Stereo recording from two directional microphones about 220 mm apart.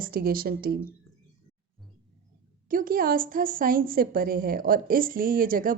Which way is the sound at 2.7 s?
40° right (ahead or behind).